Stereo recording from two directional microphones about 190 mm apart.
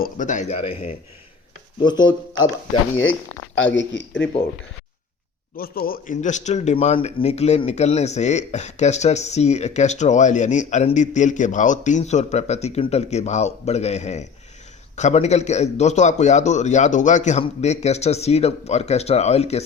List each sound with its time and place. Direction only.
0.0 s speech: 40° left (ahead or behind)
1.8 s speech: 25° left (ahead or behind)
3.8 s a man's voice: 90° left
5.5 s speech: 50° left (ahead or behind); by 19.6 s 35° left (ahead or behind)